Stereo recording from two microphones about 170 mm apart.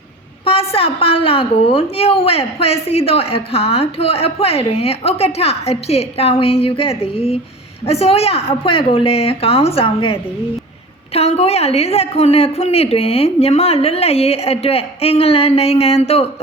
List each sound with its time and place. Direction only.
0.4 s a woman's voice: 35° left (ahead or behind)